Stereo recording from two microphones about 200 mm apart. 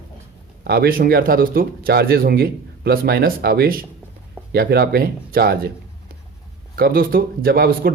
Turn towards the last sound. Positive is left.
turn(degrees=-50)  # may be behind; listen again after turning